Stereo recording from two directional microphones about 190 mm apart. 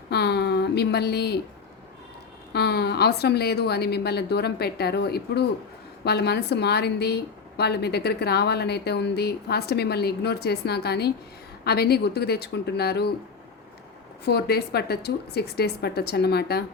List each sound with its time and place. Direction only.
0.1 s a sound: 60° left (ahead or behind)
2.5 s a woman's voice: 60° left (ahead or behind)
14.3 s a woman's voice: 55° left (ahead or behind)